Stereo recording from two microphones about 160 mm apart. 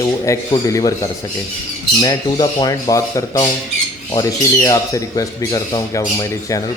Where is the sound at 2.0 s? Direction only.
25° left (ahead or behind).